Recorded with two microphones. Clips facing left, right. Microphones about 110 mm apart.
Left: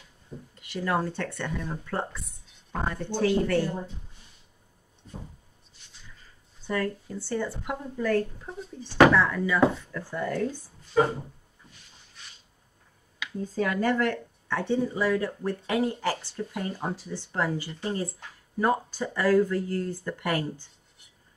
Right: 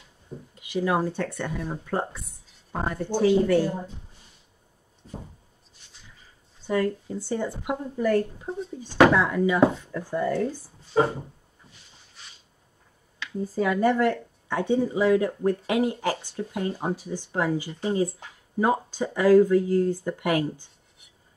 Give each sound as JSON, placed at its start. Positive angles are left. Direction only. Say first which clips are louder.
{"t": 0.6, "sound": "speech", "louder": "right 3 dB", "side_deg": -15}
{"t": 6.7, "sound": "speech", "louder": "right 4 dB", "side_deg": -15}
{"t": 10.9, "sound": "a sound", "louder": "right 1 dB", "side_deg": -25}
{"t": 13.4, "sound": "speech", "louder": "right 4 dB", "side_deg": -5}